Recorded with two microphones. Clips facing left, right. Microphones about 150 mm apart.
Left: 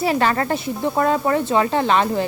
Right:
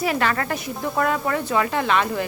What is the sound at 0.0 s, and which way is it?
Speech, 30° left (ahead or behind).